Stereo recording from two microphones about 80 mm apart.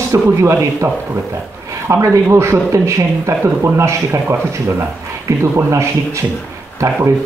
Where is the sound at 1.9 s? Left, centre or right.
Right.